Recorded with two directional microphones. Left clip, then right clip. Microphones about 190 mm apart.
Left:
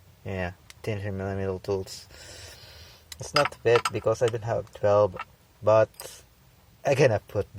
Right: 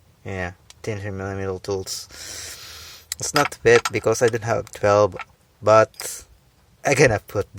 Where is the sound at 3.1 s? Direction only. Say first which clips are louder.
Right 11 dB; 35° right (ahead or behind).